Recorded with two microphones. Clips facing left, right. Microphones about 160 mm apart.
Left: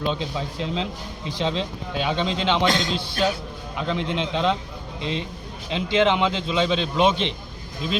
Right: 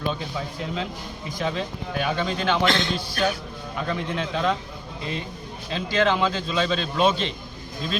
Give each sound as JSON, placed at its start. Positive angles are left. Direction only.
{"t": 0.1, "sound": "a man's voice", "side_deg": 20}
{"t": 5.7, "sound": "a man's voice", "side_deg": 20}